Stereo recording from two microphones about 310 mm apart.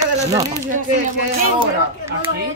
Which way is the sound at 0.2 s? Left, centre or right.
Centre.